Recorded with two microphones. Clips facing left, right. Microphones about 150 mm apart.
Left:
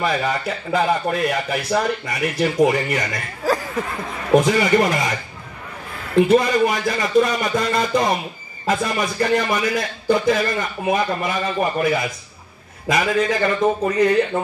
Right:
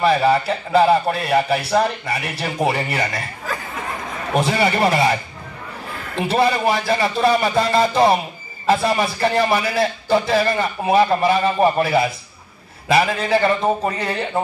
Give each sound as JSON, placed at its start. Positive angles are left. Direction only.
{"t": 0.0, "sound": "speech", "side_deg": -30}
{"t": 4.4, "sound": "speech", "side_deg": -30}
{"t": 6.2, "sound": "speech", "side_deg": -30}